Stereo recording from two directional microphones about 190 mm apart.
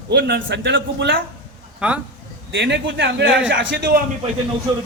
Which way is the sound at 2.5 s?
70° right (ahead or behind).